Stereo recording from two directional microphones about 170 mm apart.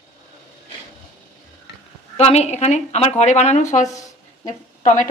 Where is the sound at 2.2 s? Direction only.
40° left (ahead or behind).